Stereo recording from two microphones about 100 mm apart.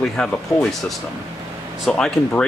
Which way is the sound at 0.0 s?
5° left (ahead or behind).